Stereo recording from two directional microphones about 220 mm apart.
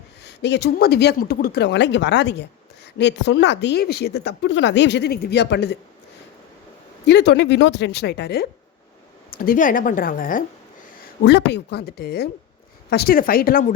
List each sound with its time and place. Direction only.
0.3 s a woman's voice: 50° left (ahead or behind)
7.0 s a woman's voice: 50° left (ahead or behind)
11.2 s a woman's voice: 50° left (ahead or behind)